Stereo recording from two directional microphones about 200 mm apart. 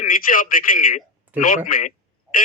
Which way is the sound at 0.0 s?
45° left (ahead or behind).